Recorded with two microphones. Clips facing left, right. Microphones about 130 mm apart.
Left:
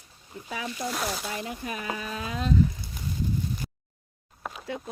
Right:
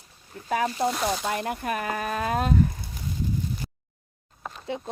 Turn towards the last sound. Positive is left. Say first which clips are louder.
# right 3 dB
turn(degrees=-25)  # may be behind; listen again after turning